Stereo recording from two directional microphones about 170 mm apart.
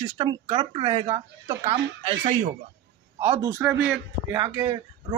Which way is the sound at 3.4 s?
20° right (ahead or behind).